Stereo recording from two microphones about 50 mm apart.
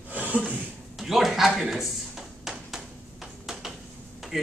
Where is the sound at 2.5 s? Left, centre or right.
Centre.